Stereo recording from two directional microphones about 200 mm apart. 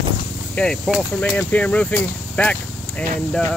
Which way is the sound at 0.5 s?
5° left (ahead or behind).